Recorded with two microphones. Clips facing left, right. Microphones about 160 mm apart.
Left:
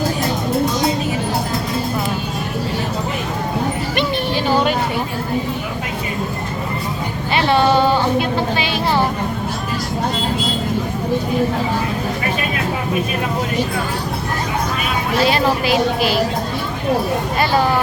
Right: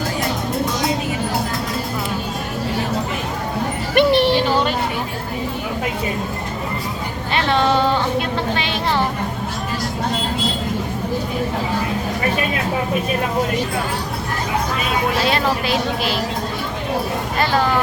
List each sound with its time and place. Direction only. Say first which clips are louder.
3.9 s music: right 10 dB; 75° right (ahead or behind)
7.3 s a sound: left 3 dB; 5° left (ahead or behind)
15.2 s speech: left 3 dB; 5° left (ahead or behind)